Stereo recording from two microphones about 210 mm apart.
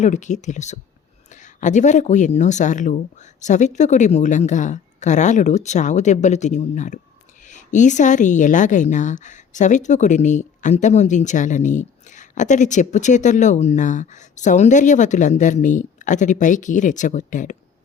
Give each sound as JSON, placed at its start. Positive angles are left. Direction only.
{"t": 0.0, "sound": "a woman's voice", "side_deg": 35}